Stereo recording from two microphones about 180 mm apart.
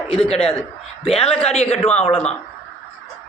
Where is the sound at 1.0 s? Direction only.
30° left (ahead or behind).